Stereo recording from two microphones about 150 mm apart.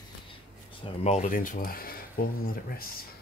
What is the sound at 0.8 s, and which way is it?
Speech, 45° left (ahead or behind).